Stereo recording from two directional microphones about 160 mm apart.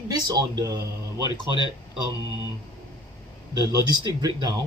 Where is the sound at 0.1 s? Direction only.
25° right (ahead or behind).